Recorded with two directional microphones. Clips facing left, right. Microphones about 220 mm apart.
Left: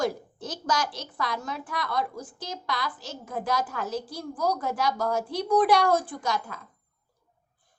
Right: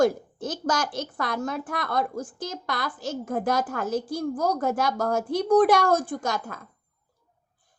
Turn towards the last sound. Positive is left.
turn(degrees=-50)  # may be behind; listen again after turning